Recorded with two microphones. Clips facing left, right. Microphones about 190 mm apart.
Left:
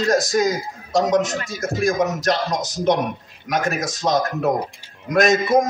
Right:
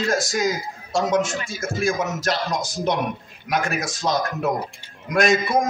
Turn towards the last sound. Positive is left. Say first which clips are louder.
# left 3 dB
turn(degrees=40)  # may be behind; listen again after turning